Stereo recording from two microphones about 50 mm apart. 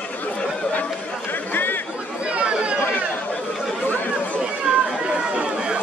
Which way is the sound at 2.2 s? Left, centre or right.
Right.